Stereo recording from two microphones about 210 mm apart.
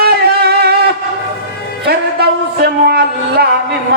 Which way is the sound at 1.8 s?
50° right (ahead or behind).